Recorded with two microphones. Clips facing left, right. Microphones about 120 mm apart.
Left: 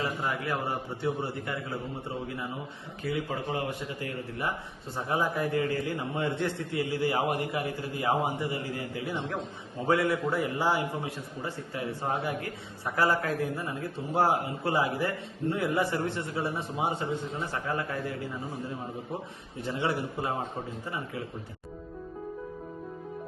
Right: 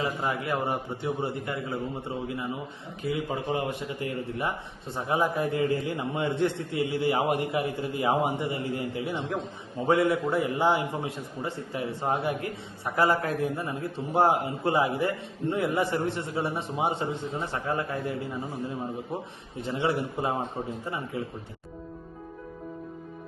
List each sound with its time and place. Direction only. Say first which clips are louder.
0.0 s a man's voice: right 2 dB; 20° right (ahead or behind)
19.5 s a man's voice: right 3 dB; 20° right (ahead or behind)